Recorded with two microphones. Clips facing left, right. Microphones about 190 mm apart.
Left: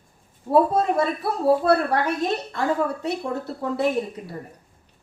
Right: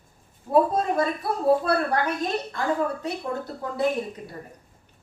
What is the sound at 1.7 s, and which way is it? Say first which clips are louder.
Speech: left 4 dB; 30° left (ahead or behind).